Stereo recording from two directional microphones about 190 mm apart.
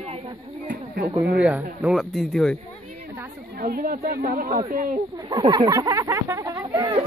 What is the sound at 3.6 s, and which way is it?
Speech, 50° right (ahead or behind).